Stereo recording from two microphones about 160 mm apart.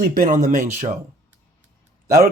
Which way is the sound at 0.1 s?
55° right (ahead or behind).